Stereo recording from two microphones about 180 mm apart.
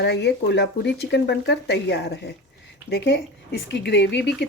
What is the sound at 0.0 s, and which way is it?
Speech, 70° left (ahead or behind).